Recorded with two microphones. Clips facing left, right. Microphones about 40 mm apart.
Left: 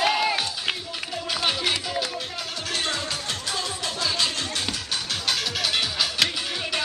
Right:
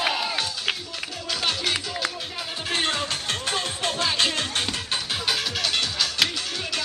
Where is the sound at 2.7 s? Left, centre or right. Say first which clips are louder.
Right 3 dB; right.